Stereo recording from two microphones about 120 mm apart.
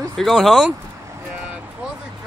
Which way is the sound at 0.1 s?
Centre (ahead or behind).